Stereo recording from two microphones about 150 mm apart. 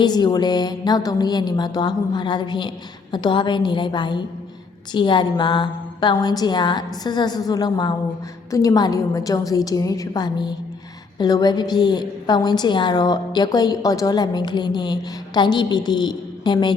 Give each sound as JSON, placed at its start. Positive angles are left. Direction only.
{"t": 0.0, "sound": "a woman's voice", "side_deg": 30}